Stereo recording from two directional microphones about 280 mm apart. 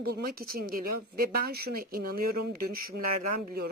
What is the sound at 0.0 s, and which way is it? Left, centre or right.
Speech, right.